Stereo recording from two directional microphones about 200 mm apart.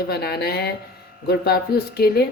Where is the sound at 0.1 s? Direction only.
50° left (ahead or behind).